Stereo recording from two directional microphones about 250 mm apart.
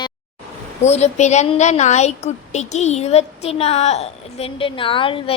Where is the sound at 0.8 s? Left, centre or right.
Left.